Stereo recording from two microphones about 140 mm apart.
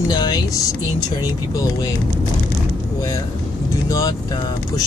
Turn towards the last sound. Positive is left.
turn(degrees=25)  # may be behind; listen again after turning